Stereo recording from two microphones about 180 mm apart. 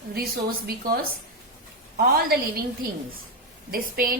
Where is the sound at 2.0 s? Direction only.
60° right (ahead or behind).